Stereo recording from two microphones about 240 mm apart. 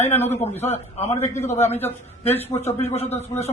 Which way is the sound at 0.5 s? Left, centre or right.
Left.